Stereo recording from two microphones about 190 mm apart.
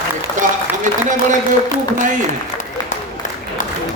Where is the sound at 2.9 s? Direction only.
45° left (ahead or behind).